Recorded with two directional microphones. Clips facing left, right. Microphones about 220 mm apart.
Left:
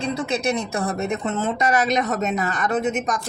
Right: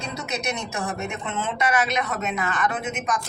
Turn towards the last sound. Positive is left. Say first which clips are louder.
# left 5 dB
turn(degrees=40)  # may be behind; listen again after turning